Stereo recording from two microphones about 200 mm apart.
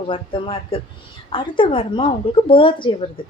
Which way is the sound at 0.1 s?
25° left (ahead or behind).